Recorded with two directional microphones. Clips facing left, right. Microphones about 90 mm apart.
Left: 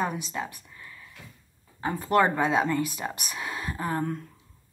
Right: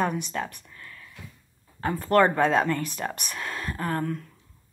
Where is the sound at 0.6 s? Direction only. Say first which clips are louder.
Right 1 dB; 15° left (ahead or behind).